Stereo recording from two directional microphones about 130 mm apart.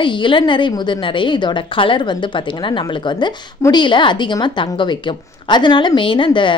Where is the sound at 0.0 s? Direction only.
40° left (ahead or behind).